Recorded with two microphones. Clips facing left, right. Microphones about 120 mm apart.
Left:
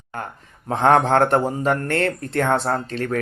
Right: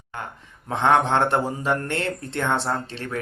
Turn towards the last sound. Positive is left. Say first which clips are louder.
# left 5 dB
turn(degrees=45)  # may be behind; listen again after turning